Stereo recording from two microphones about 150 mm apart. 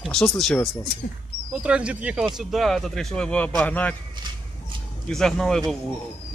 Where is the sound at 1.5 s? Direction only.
10° right (ahead or behind); by 4.0 s 10° left (ahead or behind).